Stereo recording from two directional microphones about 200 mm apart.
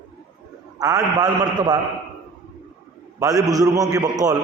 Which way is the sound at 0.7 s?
20° right (ahead or behind).